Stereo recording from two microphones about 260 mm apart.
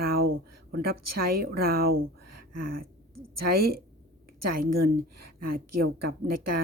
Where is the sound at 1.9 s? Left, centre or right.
Right.